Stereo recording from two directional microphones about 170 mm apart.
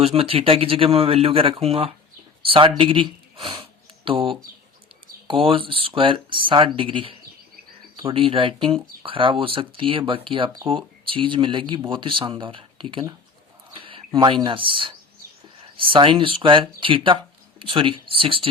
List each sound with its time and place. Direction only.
0.0 s speech: 35° right (ahead or behind)
13.7 s a sound: 30° right (ahead or behind)
14.4 s speech: 30° right (ahead or behind)